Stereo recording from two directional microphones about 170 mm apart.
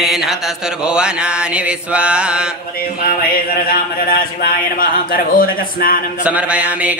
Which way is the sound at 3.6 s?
60° left (ahead or behind).